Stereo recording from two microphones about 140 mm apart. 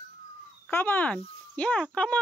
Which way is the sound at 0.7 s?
15° left (ahead or behind).